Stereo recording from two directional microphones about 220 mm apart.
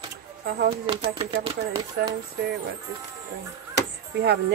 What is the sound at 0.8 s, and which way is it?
Speech, 25° right (ahead or behind).